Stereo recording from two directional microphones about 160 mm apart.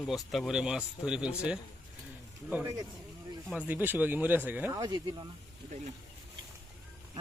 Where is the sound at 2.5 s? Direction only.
15° right (ahead or behind).